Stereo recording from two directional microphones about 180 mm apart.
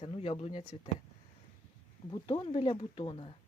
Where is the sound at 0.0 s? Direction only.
35° left (ahead or behind).